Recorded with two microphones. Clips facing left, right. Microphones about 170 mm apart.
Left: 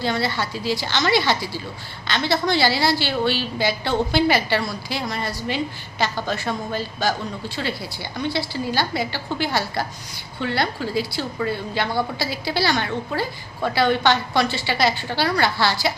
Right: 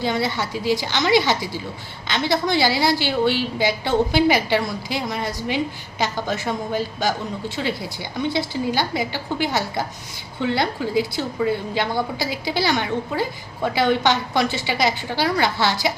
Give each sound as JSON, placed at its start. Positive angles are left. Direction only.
{"t": 0.0, "sound": "a woman's voice", "side_deg": -15}